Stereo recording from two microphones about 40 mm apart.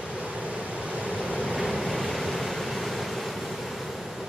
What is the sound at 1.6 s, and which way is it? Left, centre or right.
Vehicle, centre.